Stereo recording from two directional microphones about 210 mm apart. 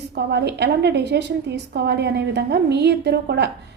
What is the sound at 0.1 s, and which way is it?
A woman's voice, 55° right (ahead or behind).